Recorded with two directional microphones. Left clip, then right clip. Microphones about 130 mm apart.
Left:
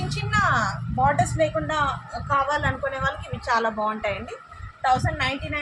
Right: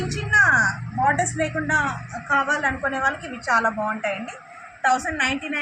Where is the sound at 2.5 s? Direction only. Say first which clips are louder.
Right 2 dB; 20° left (ahead or behind).